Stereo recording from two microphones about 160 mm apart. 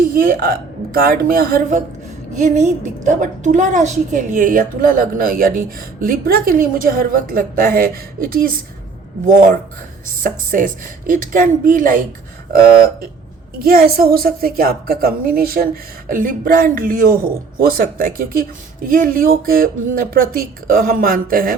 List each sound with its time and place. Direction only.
0.1 s a woman's voice: 65° right (ahead or behind)
2.4 s a woman's voice: 50° right (ahead or behind)
10.2 s a woman's voice: 55° right (ahead or behind)
13.6 s a woman's voice: 65° right (ahead or behind)